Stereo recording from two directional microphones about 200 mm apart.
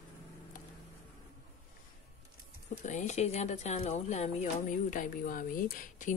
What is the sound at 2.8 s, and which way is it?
Speech, 35° left (ahead or behind).